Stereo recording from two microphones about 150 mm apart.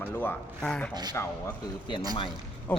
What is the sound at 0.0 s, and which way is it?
A man's voice, 10° left (ahead or behind).